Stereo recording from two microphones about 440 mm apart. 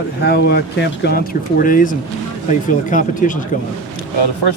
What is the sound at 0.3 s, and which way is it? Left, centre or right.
Speech, left.